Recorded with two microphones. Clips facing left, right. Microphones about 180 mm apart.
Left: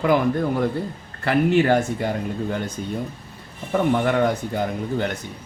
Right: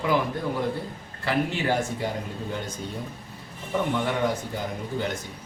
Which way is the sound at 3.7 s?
55° left (ahead or behind).